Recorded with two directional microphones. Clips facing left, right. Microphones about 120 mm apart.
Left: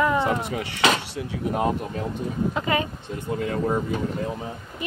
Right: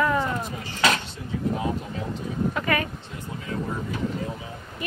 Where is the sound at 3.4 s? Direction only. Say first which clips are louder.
Left 6 dB; 55° left (ahead or behind).